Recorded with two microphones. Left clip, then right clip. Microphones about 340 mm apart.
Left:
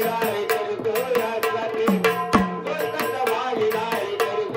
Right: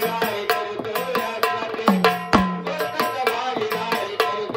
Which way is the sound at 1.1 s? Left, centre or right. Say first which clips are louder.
Even; centre.